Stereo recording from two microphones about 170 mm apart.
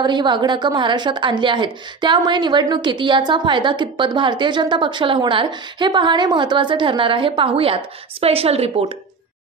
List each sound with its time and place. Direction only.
0.0 s a woman's voice: 25° right (ahead or behind)